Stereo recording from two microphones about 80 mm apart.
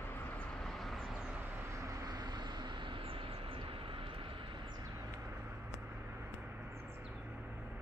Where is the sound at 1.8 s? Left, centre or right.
Right.